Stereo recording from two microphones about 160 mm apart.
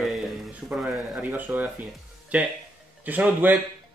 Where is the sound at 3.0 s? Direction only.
10° right (ahead or behind).